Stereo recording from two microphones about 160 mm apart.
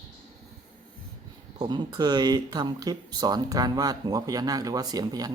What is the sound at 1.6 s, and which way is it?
Speech, 25° right (ahead or behind).